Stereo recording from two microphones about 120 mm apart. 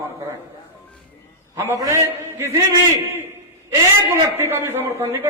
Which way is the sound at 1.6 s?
25° right (ahead or behind).